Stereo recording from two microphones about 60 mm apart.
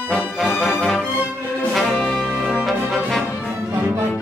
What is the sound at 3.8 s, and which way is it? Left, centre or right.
Music, right.